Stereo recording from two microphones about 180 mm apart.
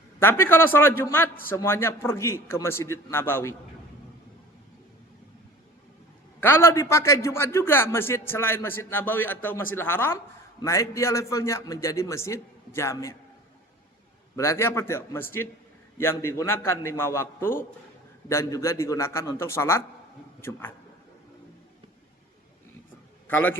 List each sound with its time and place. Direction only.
0.2 s a man's voice: 10° left (ahead or behind)
6.4 s a man's voice: 15° left (ahead or behind)
14.3 s a man's voice: 15° left (ahead or behind)
23.3 s a man's voice: 10° left (ahead or behind)